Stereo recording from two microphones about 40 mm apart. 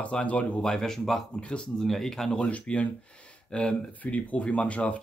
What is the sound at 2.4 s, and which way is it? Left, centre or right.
Speech, left.